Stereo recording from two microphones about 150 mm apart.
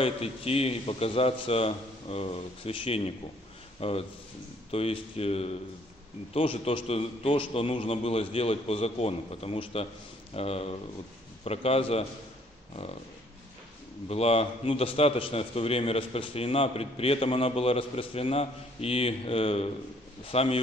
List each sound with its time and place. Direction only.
0.0 s a man's voice: 40° left (ahead or behind)
14.0 s a man's voice: 40° left (ahead or behind)